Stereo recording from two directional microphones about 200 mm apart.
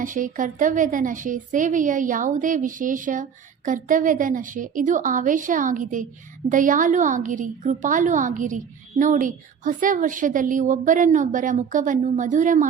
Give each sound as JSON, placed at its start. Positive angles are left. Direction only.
{"t": 0.0, "sound": "a woman's voice", "side_deg": -40}